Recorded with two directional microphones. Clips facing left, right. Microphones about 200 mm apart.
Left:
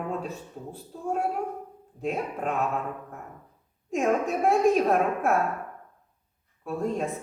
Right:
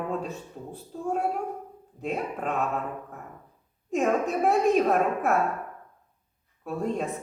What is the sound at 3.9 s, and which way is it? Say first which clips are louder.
Speech: even; centre (ahead or behind).